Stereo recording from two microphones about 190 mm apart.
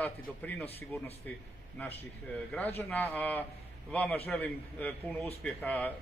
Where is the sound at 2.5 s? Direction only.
10° left (ahead or behind).